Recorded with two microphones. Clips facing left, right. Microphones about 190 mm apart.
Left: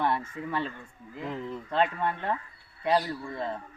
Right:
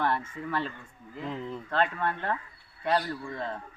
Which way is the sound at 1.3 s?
5° left (ahead or behind).